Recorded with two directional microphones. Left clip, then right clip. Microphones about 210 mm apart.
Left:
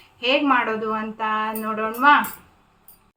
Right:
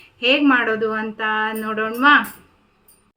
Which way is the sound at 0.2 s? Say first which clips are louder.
Right 3 dB; 20° right (ahead or behind).